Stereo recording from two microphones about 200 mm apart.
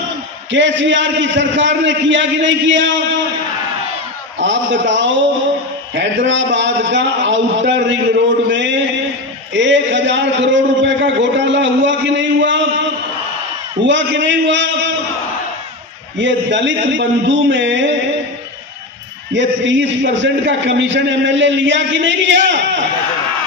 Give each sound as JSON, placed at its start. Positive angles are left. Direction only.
{"t": 0.5, "sound": "a man's voice", "side_deg": -65}
{"t": 4.4, "sound": "a man's voice", "side_deg": -65}
{"t": 13.8, "sound": "a man's voice", "side_deg": -65}
{"t": 16.2, "sound": "a man's voice", "side_deg": -65}
{"t": 19.3, "sound": "a man's voice", "side_deg": -65}